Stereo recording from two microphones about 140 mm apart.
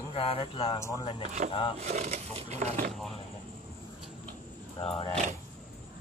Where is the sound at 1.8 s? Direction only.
55° right (ahead or behind).